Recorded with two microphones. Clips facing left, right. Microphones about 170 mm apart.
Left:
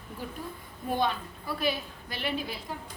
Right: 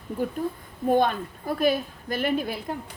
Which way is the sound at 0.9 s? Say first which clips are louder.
Right 7 dB; 50° right (ahead or behind).